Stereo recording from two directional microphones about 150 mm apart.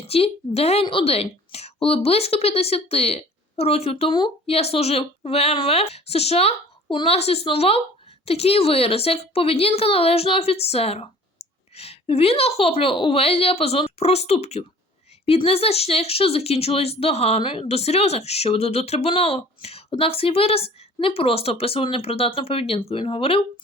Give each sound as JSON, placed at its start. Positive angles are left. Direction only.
{"t": 0.1, "sound": "a woman's voice", "side_deg": 40}